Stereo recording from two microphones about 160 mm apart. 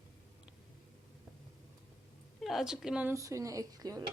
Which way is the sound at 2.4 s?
Centre (ahead or behind).